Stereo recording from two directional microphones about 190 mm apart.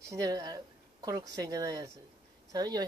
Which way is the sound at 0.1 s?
20° right (ahead or behind).